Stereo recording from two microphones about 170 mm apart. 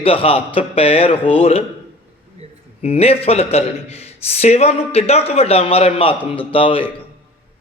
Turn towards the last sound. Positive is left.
turn(degrees=30)  # may be behind; listen again after turning